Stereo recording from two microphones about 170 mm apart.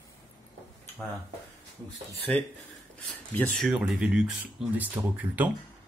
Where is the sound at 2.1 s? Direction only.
Centre (ahead or behind).